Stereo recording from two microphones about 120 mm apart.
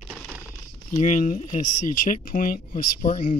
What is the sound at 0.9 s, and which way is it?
Speech, 90° left.